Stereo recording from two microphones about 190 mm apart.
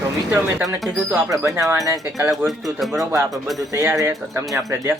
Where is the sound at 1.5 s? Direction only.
15° right (ahead or behind).